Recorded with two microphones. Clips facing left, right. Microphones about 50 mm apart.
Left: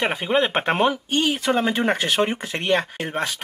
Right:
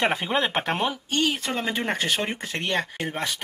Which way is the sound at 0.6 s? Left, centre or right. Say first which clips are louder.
Left 6 dB; left.